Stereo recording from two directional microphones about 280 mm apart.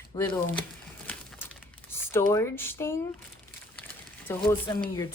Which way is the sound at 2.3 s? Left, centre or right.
Centre.